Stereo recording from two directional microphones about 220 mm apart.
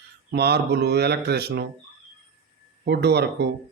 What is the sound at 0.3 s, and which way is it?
Speech, 45° right (ahead or behind).